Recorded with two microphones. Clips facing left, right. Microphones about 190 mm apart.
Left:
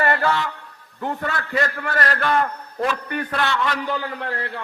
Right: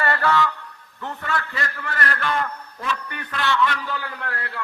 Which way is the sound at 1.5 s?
40° left (ahead or behind).